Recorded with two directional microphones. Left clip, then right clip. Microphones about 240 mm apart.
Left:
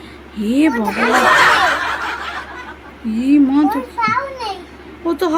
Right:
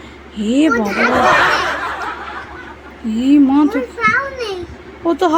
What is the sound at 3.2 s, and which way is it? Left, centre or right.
Speech, centre.